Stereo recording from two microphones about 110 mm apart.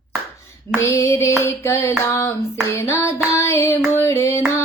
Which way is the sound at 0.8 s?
25° left (ahead or behind).